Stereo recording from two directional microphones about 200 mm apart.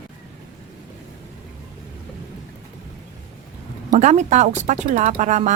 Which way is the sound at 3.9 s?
35° right (ahead or behind).